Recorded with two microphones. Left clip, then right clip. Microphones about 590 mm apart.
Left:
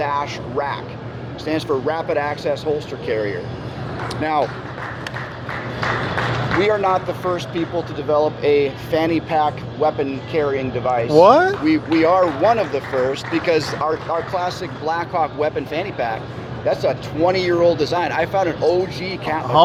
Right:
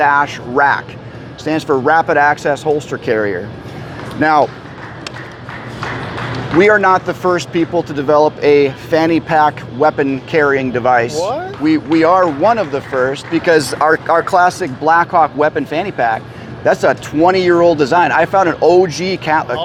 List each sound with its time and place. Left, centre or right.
0.0 s speech: right
6.6 s speech: right
11.2 s speech: left
11.6 s speech: right